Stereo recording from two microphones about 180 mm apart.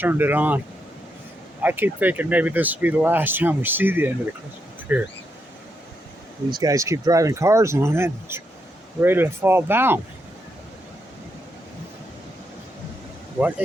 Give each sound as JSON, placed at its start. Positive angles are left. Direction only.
{"t": 0.0, "sound": "speech", "side_deg": -10}
{"t": 1.6, "sound": "speech", "side_deg": -10}
{"t": 6.5, "sound": "speech", "side_deg": -20}
{"t": 13.4, "sound": "speech", "side_deg": -10}